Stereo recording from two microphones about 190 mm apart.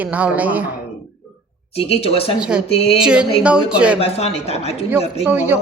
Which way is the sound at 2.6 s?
30° left (ahead or behind).